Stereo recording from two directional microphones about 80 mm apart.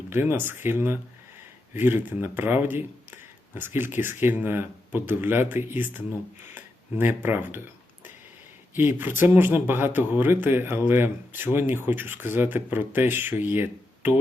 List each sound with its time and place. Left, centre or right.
0.1 s speech: right
7.0 s speech: right
8.7 s speech: right